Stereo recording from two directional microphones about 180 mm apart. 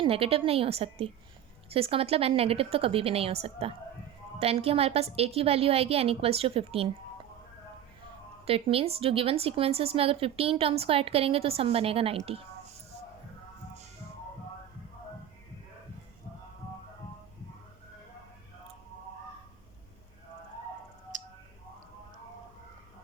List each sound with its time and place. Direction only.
0.0 s a woman's voice: 30° right (ahead or behind)
8.4 s a woman's voice: 30° right (ahead or behind)
21.1 s a sound: 45° right (ahead or behind)